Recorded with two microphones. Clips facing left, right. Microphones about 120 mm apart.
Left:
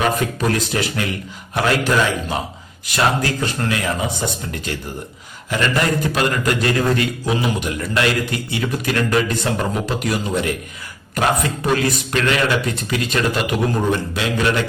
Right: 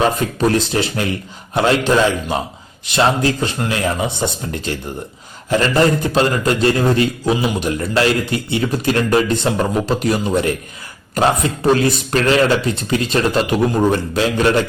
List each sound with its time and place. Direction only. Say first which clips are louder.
0.0 s a man's voice: right 3 dB; 30° right (ahead or behind)